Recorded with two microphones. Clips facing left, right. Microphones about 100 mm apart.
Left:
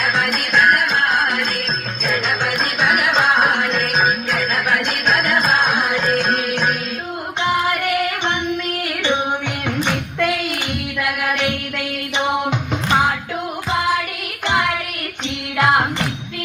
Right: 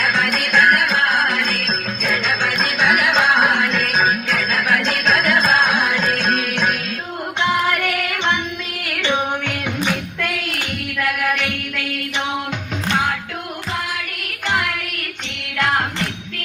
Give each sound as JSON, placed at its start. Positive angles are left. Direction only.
{"t": 0.2, "sound": "music", "side_deg": 15}
{"t": 9.6, "sound": "a sound", "side_deg": 0}
{"t": 12.9, "sound": "music", "side_deg": 10}
{"t": 14.5, "sound": "music", "side_deg": 5}